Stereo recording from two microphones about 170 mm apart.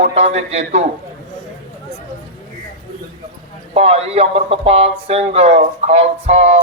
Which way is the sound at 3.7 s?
35° right (ahead or behind).